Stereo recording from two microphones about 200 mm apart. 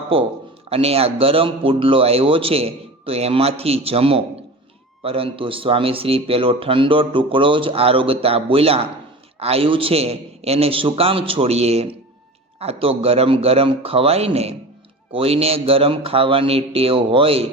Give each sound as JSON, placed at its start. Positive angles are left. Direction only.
{"t": 0.1, "sound": "speech", "side_deg": -30}